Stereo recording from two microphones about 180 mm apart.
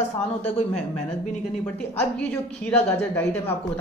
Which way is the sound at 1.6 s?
5° left (ahead or behind).